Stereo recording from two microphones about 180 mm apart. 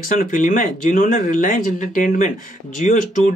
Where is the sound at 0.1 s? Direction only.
45° left (ahead or behind).